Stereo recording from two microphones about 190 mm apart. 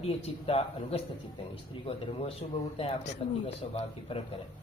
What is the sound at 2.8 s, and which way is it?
Speech, 30° left (ahead or behind).